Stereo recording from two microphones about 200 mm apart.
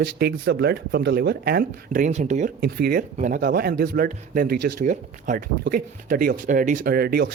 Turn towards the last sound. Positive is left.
turn(degrees=-50)  # may be behind; listen again after turning